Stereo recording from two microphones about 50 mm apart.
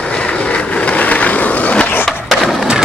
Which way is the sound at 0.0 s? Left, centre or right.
Left.